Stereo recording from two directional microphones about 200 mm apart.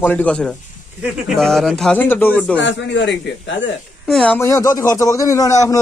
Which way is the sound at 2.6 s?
65° left (ahead or behind).